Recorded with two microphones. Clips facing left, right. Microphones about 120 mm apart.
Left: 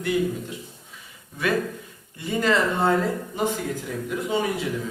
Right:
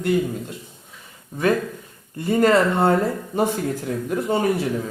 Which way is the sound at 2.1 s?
55° right (ahead or behind).